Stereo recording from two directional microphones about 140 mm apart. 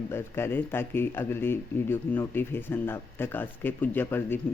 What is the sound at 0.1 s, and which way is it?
A man's voice, 15° left (ahead or behind).